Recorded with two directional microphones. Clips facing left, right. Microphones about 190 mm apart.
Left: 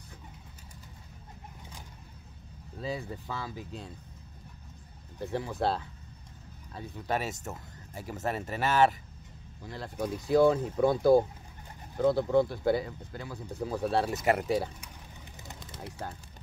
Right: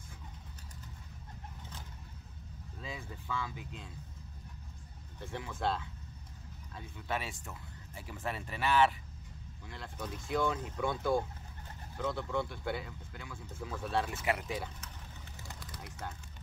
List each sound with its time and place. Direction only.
2.8 s speech: 35° left (ahead or behind)
5.2 s speech: 40° left (ahead or behind)
15.4 s a sound: 25° left (ahead or behind)